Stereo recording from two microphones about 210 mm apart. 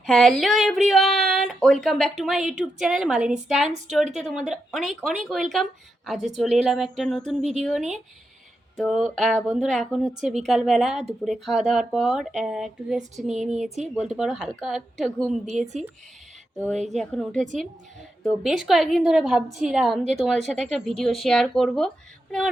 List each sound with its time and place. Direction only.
0.0 s a woman's voice: centre (ahead or behind)
13.3 s speech: 35° right (ahead or behind)
14.1 s a woman's voice: 5° right (ahead or behind)
16.9 s a woman's voice: centre (ahead or behind)